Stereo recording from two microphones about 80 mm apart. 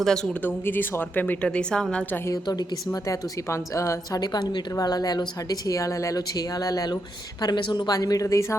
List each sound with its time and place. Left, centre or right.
0.0 s speech: centre
0.4 s a woman's voice: left
2.2 s a woman's voice: left
4.2 s a woman's voice: left
7.4 s a woman's voice: left
7.9 s a woman's voice: left